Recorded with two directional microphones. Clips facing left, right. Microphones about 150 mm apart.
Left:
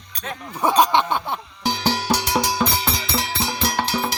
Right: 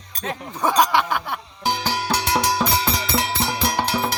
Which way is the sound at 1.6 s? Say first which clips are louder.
Left 2 dB; 50° right (ahead or behind).